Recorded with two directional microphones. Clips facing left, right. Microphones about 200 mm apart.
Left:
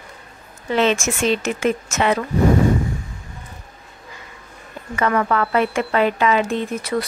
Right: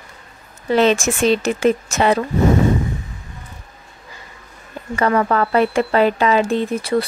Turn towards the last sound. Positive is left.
turn(degrees=-30)  # may be behind; listen again after turning